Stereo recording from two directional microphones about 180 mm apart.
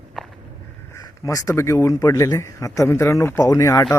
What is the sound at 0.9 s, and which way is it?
A man's voice, 20° left (ahead or behind).